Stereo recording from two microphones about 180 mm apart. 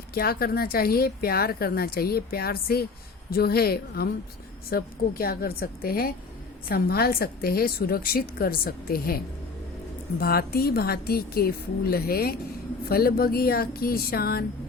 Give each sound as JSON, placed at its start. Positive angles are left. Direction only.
{"t": 0.1, "sound": "speech", "side_deg": 60}